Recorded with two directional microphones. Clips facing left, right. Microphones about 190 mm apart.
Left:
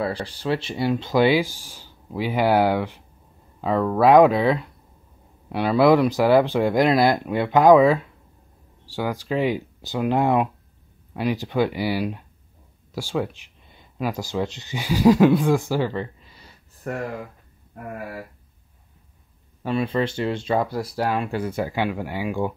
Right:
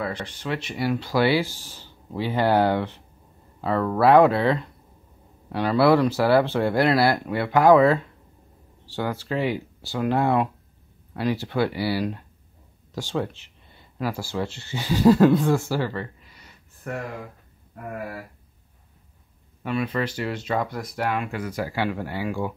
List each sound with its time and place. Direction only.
0.0 s speech: 35° left (ahead or behind)
16.8 s speech: 40° left (ahead or behind)
19.6 s speech: 30° left (ahead or behind)